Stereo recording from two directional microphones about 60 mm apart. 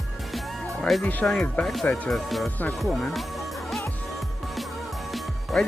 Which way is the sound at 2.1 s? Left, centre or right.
Centre.